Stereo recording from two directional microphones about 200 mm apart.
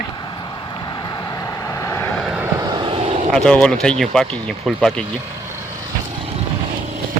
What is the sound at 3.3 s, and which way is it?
Speech, 5° left (ahead or behind).